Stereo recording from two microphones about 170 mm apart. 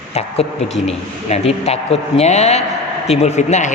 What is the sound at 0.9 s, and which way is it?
A man's voice, 35° left (ahead or behind).